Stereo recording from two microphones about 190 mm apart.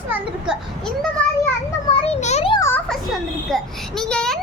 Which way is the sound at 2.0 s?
35° left (ahead or behind).